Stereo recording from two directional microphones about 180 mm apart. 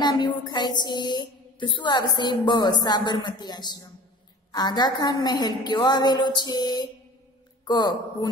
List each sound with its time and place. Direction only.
0.0 s a woman's voice: 25° left (ahead or behind)